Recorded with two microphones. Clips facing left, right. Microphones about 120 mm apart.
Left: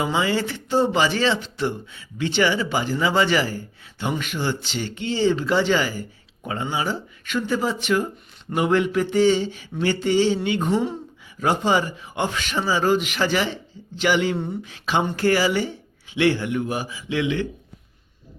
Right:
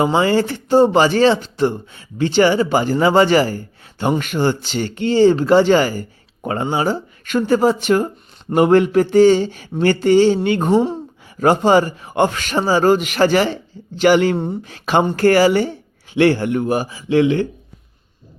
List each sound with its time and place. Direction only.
0.0 s speech: 45° right (ahead or behind)
11.3 s speech: 50° right (ahead or behind)
14.3 s speech: 30° right (ahead or behind)
14.6 s speech: 50° right (ahead or behind)